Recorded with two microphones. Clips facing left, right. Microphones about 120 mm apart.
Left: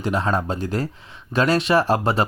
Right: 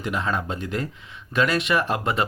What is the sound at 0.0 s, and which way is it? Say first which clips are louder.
Speech: left 4 dB; 35° left (ahead or behind).